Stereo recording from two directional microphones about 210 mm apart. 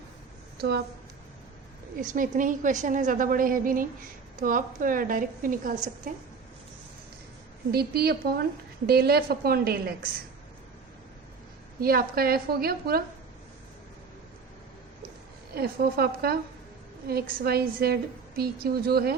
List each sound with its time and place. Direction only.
2.0 s a woman's voice: 40° right (ahead or behind)
7.7 s a woman's voice: 50° right (ahead or behind)
11.8 s a woman's voice: 45° right (ahead or behind)
15.5 s a woman's voice: 45° right (ahead or behind)